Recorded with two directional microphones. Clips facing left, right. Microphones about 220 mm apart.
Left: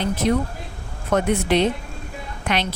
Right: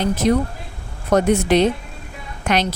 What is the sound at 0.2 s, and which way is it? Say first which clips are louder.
Speech: right 3 dB; 40° right (ahead or behind).